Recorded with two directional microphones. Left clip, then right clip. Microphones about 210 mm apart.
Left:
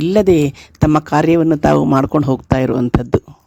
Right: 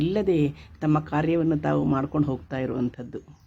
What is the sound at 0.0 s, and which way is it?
Speech, 50° left (ahead or behind).